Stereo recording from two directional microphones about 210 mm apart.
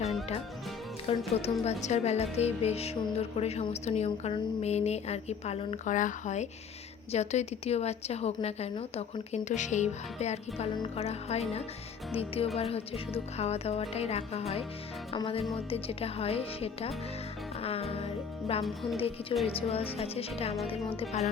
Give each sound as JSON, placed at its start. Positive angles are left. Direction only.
{"t": 1.1, "sound": "a woman's voice", "side_deg": 25}
{"t": 17.6, "sound": "music", "side_deg": 30}
{"t": 18.6, "sound": "speech", "side_deg": 0}
{"t": 18.9, "sound": "speech", "side_deg": 30}